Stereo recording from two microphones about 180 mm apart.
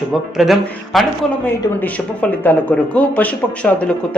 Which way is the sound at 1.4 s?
10° left (ahead or behind).